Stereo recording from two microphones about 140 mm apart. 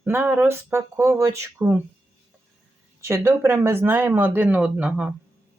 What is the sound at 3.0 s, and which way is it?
Speech, 20° right (ahead or behind).